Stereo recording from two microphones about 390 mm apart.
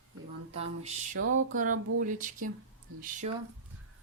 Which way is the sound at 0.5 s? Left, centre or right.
Centre.